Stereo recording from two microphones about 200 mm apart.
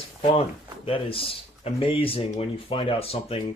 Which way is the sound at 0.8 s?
25° left (ahead or behind).